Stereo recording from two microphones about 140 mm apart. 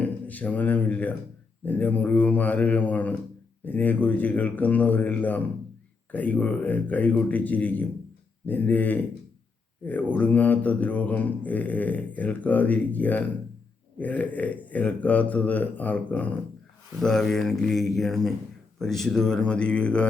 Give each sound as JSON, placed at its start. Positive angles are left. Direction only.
{"t": 0.0, "sound": "speech", "side_deg": 10}